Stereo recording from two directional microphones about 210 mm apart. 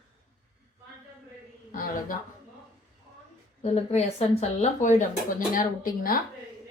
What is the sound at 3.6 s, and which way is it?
A woman's voice, 30° left (ahead or behind).